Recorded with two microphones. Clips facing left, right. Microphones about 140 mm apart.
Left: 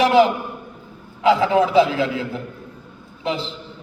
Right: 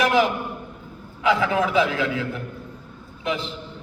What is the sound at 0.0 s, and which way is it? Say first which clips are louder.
A man's voice: left 5 dB; 30° left (ahead or behind).